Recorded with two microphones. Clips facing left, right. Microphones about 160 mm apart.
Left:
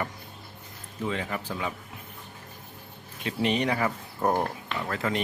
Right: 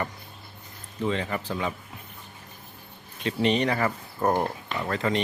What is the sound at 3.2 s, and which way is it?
A man's voice, 10° left (ahead or behind).